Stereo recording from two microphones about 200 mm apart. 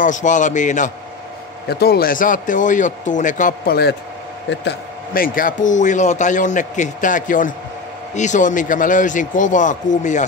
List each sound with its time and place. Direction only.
0.0 s a man's voice: 40° left (ahead or behind)
1.7 s a man's voice: 50° left (ahead or behind)